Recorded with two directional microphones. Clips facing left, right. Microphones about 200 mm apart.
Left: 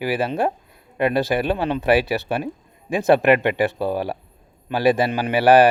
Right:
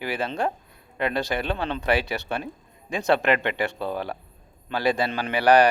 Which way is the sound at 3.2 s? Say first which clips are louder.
Left 6 dB; 15° left (ahead or behind).